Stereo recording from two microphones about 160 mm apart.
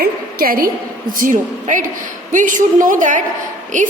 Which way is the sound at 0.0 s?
65° right (ahead or behind).